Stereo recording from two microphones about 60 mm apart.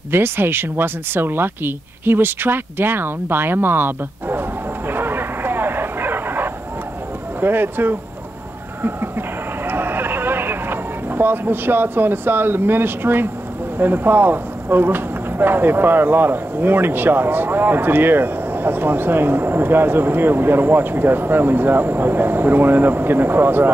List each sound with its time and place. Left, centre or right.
0.1 s speech: right
9.7 s a sound: right
13.7 s speech: right